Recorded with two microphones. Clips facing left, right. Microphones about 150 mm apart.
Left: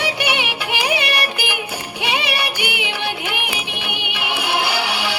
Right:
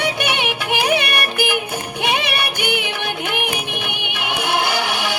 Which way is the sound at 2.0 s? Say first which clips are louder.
Even; 50° right (ahead or behind).